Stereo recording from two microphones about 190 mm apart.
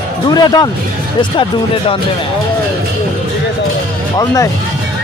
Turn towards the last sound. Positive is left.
turn(degrees=15)  # may be behind; listen again after turning